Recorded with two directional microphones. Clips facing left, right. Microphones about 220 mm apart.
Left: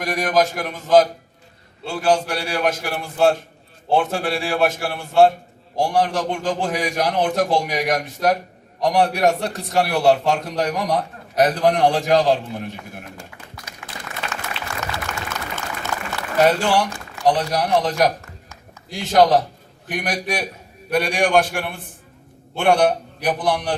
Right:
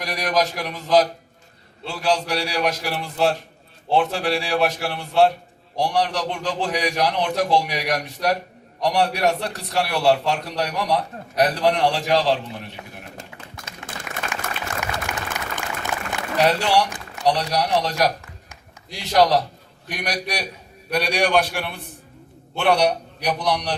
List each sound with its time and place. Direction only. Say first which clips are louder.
0.0 s a man's voice: left 3 dB; 50° left (ahead or behind)
14.1 s applause: right 1 dB; 15° right (ahead or behind)
14.9 s a sound: even; 15° right (ahead or behind)
16.4 s a man's voice: left 2 dB; 50° left (ahead or behind)